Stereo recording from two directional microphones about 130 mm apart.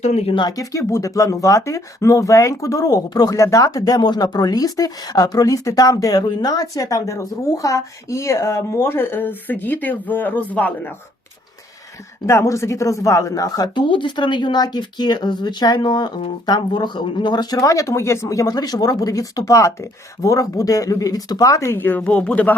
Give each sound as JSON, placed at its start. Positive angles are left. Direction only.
{"t": 0.0, "sound": "speech", "side_deg": 55}
{"t": 0.3, "sound": "speech", "side_deg": 30}
{"t": 12.2, "sound": "speech", "side_deg": 20}